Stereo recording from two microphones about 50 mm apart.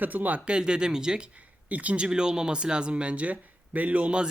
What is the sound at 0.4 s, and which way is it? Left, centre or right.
Speech, centre.